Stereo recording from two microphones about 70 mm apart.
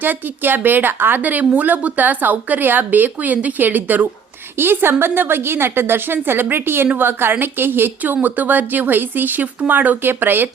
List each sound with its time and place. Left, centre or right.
0.0 s a woman's voice: right